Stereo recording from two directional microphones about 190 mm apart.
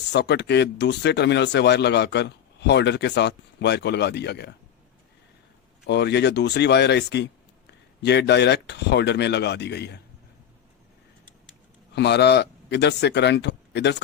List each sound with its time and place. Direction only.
0.1 s speech: 65° left (ahead or behind)
5.8 s speech: 65° left (ahead or behind)
11.9 s speech: 65° left (ahead or behind)